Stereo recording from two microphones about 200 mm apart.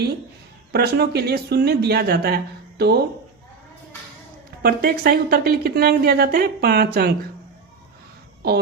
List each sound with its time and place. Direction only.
0.7 s a woman's voice: 55° right (ahead or behind)
4.6 s a woman's voice: 50° right (ahead or behind)
8.4 s a woman's voice: 55° right (ahead or behind)